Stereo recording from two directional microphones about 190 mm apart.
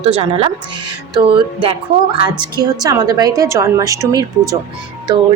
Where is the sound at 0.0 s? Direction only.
30° right (ahead or behind).